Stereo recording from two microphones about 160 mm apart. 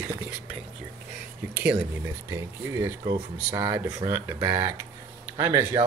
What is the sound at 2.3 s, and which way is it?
Speech, 15° right (ahead or behind).